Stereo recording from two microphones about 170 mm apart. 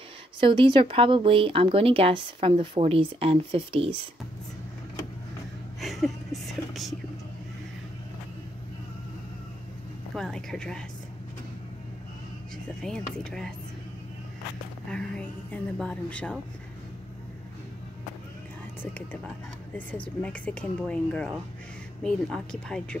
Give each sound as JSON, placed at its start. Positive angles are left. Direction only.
{"t": 0.4, "sound": "speech", "side_deg": -30}
{"t": 5.8, "sound": "a sound", "side_deg": 0}
{"t": 10.1, "sound": "speech", "side_deg": 5}
{"t": 12.8, "sound": "speech", "side_deg": 5}
{"t": 14.9, "sound": "a woman's voice", "side_deg": 5}
{"t": 18.8, "sound": "a woman's voice", "side_deg": 10}